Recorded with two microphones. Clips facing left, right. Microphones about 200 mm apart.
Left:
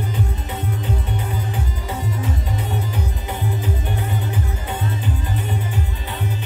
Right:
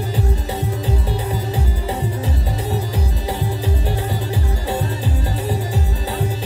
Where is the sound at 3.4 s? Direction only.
35° right (ahead or behind).